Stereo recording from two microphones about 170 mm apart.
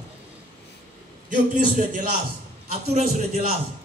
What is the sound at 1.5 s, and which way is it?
A man's voice, 45° right (ahead or behind).